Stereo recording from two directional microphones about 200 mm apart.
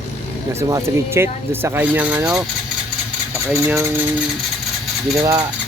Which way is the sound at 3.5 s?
15° right (ahead or behind).